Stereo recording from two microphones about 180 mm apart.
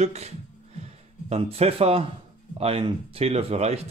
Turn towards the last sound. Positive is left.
turn(degrees=-35)  # may be behind; listen again after turning